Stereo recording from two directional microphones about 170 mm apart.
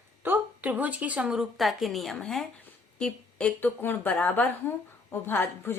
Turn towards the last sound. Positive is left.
turn(degrees=15)  # may be behind; listen again after turning